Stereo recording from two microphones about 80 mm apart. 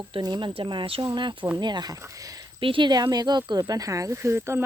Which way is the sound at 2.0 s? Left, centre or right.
Right.